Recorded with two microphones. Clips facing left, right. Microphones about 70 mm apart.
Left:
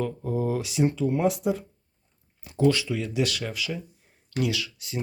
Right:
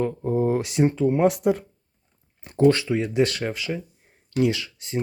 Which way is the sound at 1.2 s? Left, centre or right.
Right.